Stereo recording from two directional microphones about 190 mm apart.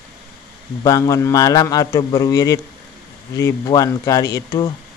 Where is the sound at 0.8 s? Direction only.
20° left (ahead or behind).